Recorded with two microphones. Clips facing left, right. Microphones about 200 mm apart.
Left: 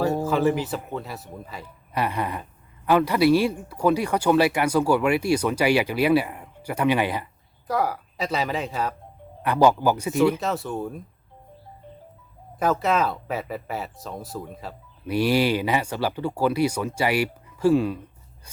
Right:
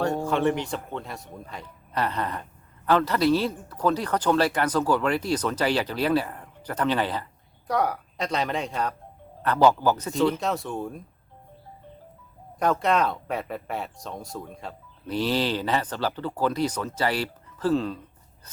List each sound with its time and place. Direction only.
0.0 s speech: 5° left (ahead or behind)
7.7 s speech: centre (ahead or behind)
12.5 s speech: 5° left (ahead or behind)
18.4 s a sound: 10° left (ahead or behind)